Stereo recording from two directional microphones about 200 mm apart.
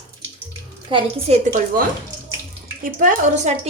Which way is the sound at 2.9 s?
40° right (ahead or behind).